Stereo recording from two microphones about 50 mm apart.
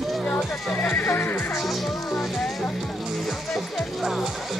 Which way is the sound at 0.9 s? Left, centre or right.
Left.